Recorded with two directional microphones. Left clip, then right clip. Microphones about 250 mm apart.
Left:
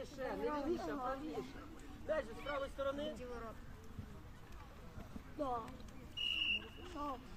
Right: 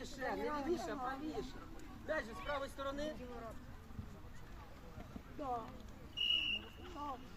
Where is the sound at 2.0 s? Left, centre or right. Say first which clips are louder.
Left 1 dB; right.